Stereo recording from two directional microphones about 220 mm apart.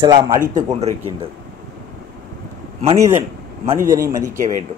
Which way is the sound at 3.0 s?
10° right (ahead or behind).